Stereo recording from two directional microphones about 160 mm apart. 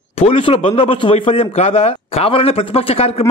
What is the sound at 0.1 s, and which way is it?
A man's voice, 35° left (ahead or behind).